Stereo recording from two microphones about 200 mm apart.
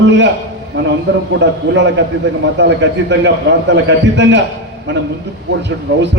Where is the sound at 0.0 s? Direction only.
60° right (ahead or behind).